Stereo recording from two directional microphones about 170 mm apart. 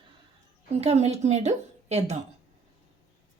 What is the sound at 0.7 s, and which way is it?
A woman's voice, 40° right (ahead or behind).